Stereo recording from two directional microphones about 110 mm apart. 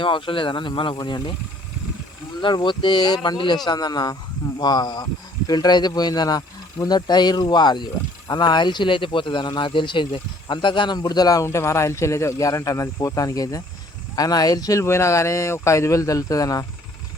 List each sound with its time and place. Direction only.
0.0 s speech: 50° left (ahead or behind)
2.4 s speech: 45° left (ahead or behind)